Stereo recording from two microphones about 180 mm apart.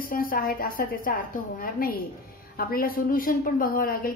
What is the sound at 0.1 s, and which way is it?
A woman's voice, 55° left (ahead or behind).